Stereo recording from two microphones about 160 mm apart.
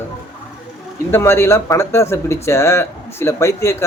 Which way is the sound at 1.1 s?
15° left (ahead or behind).